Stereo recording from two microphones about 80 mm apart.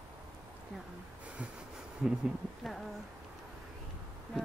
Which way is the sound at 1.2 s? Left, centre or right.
Centre.